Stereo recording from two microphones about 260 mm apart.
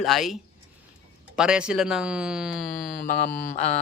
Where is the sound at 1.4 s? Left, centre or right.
Centre.